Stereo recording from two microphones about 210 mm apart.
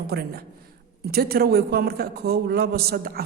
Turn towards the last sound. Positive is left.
turn(degrees=-45)  # may be behind; listen again after turning